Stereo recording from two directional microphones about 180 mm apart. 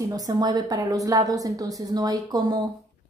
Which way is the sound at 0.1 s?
20° right (ahead or behind).